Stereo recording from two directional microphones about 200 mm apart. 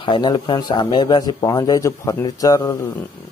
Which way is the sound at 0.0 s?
25° left (ahead or behind).